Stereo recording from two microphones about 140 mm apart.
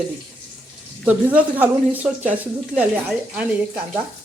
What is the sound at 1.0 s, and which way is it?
Speech, 10° right (ahead or behind).